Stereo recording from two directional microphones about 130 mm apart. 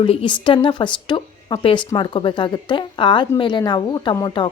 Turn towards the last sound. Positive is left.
turn(degrees=35)  # may be behind; listen again after turning